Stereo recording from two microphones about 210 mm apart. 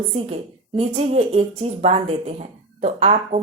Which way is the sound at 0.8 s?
30° right (ahead or behind).